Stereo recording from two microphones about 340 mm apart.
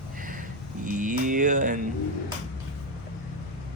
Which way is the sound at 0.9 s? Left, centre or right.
Right.